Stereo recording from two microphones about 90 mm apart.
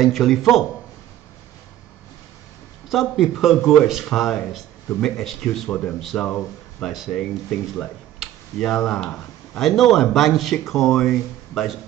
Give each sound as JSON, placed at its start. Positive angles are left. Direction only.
{"t": 0.0, "sound": "speech", "side_deg": 0}
{"t": 2.9, "sound": "speech", "side_deg": 0}
{"t": 5.7, "sound": "speech", "side_deg": 20}
{"t": 5.9, "sound": "speech", "side_deg": 5}